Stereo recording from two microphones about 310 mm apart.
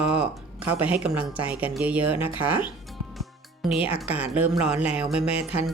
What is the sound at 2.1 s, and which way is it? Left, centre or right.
Speech, centre.